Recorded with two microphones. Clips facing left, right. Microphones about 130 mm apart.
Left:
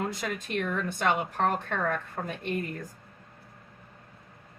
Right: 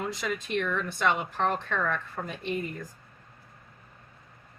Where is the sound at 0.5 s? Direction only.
45° left (ahead or behind).